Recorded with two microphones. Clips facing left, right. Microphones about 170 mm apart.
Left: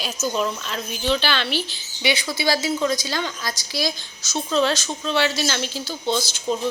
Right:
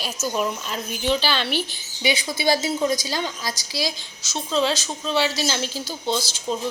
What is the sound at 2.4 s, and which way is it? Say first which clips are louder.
A woman's voice: right 1 dB; 20° right (ahead or behind).